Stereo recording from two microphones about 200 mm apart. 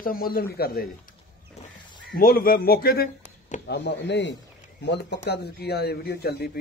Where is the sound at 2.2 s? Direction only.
45° left (ahead or behind).